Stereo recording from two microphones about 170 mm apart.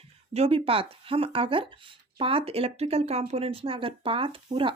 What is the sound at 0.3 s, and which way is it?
Speech, 35° right (ahead or behind).